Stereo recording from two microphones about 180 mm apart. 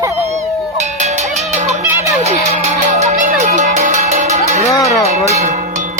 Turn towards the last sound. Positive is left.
turn(degrees=-45)  # may be behind; listen again after turning